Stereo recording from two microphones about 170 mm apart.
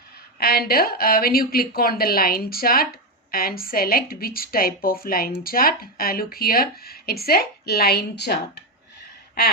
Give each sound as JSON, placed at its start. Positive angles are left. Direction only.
{"t": 0.3, "sound": "a woman's voice", "side_deg": 65}